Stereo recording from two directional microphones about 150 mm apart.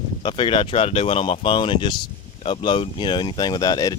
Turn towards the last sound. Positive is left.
turn(degrees=25)  # may be behind; listen again after turning